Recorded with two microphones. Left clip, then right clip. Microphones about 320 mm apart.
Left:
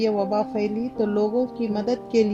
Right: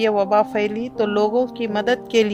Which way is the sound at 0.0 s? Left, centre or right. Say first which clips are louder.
Right 6 dB; right.